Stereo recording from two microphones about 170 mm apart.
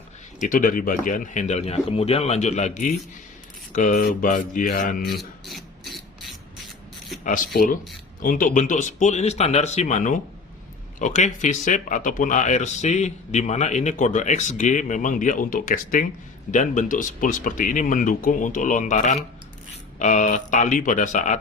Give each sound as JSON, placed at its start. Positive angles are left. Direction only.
{"t": 0.4, "sound": "speech", "side_deg": 55}
{"t": 5.1, "sound": "a sound", "side_deg": 0}
{"t": 8.2, "sound": "speech", "side_deg": 55}